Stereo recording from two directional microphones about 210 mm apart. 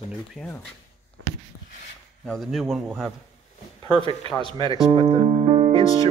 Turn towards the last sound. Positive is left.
turn(degrees=-25)  # may be behind; listen again after turning